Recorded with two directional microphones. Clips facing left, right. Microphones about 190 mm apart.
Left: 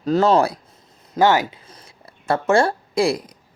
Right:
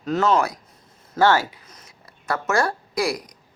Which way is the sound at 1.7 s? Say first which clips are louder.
Left 3 dB; 30° left (ahead or behind).